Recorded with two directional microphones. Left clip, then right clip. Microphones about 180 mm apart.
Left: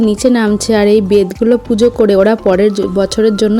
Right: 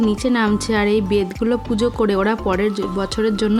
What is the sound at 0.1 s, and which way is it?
Speech, 25° left (ahead or behind).